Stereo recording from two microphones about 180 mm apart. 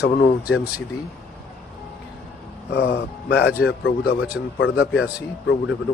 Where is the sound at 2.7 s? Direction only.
65° left (ahead or behind).